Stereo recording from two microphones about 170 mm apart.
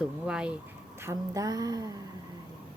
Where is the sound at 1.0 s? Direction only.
20° right (ahead or behind).